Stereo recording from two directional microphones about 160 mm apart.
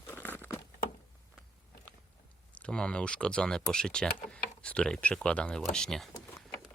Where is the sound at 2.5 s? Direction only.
5° left (ahead or behind).